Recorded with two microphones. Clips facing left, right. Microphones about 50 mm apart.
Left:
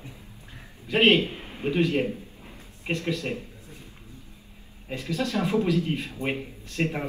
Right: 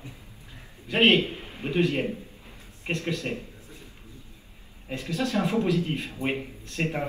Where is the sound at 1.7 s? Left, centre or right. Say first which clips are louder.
Even; right.